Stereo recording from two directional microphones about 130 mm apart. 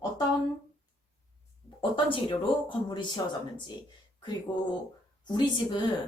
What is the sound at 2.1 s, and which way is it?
Speech, 40° left (ahead or behind).